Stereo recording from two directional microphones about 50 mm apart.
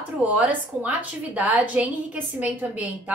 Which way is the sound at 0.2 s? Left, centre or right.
Right.